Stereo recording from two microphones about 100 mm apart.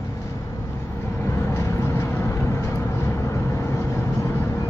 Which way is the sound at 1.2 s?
30° left (ahead or behind).